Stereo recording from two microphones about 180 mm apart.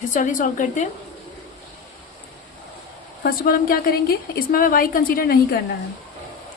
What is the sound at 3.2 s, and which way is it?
A woman's voice, 55° left (ahead or behind).